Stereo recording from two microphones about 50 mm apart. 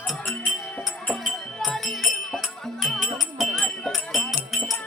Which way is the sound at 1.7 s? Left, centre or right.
Centre.